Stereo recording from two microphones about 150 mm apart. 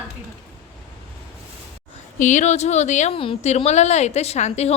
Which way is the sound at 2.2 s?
55° left (ahead or behind).